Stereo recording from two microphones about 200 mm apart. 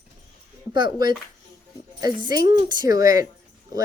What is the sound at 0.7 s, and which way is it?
Speech, 20° right (ahead or behind).